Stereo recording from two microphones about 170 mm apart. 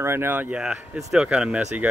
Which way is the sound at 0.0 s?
15° right (ahead or behind).